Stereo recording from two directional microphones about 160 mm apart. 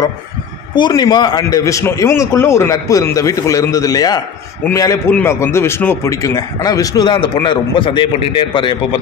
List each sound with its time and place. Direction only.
0.7 s a man's voice: 25° left (ahead or behind)